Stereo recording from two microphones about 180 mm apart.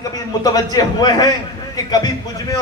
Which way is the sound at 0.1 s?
20° left (ahead or behind).